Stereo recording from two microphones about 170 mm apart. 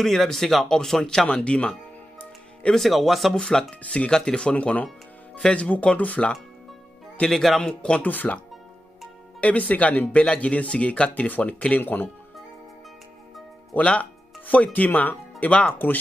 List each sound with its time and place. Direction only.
0.0 s speech: centre (ahead or behind)
9.4 s speech: 10° left (ahead or behind)
13.7 s speech: 5° left (ahead or behind)